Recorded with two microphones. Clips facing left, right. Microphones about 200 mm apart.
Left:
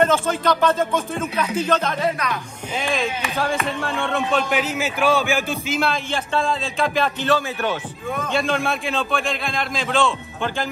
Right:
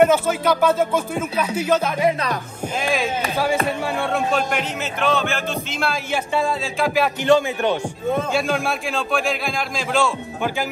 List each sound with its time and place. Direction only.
0.0 s speech: 10° right (ahead or behind)
3.6 s speech: 10° right (ahead or behind)
4.3 s a man's voice: centre (ahead or behind)
6.1 s a man's voice: 5° right (ahead or behind)
7.2 s speech: 15° right (ahead or behind)
8.3 s a man's voice: centre (ahead or behind)